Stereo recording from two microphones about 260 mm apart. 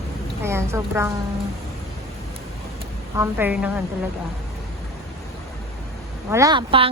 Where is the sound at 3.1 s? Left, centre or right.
Centre.